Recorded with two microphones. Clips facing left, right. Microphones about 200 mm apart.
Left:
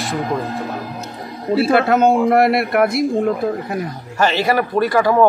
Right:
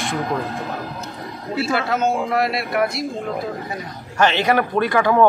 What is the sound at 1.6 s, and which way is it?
Speech, 55° left (ahead or behind).